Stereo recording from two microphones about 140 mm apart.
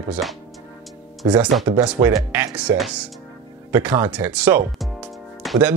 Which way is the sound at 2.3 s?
10° right (ahead or behind).